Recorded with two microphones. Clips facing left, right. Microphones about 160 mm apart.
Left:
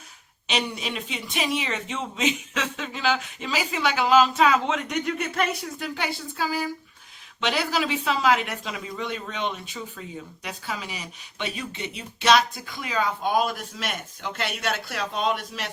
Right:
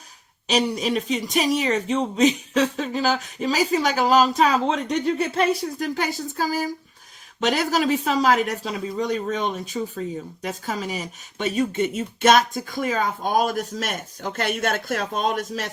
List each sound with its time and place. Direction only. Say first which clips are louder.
0.4 s speech: right 7 dB; 40° right (ahead or behind)